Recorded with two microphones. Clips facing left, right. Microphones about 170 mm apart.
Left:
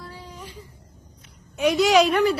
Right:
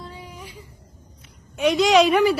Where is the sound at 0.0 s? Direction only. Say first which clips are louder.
Right 1 dB; 15° right (ahead or behind).